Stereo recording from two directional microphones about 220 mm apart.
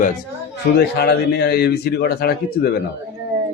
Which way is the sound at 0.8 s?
45° left (ahead or behind).